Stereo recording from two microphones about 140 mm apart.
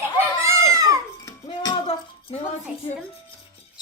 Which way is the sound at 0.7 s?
25° right (ahead or behind).